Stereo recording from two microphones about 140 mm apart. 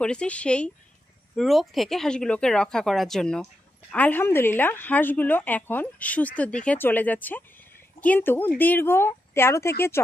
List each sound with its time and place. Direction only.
0.0 s speech: 5° left (ahead or behind)